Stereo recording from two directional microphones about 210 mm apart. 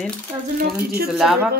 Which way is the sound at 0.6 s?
45° right (ahead or behind).